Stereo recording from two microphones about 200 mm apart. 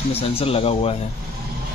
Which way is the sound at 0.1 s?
30° left (ahead or behind).